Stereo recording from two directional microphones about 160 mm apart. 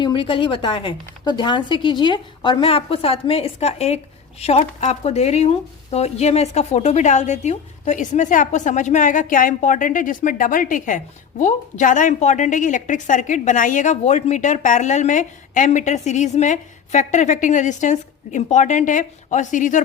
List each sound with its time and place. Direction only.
0.0 s a woman's voice: 30° left (ahead or behind); by 19.8 s 50° left (ahead or behind)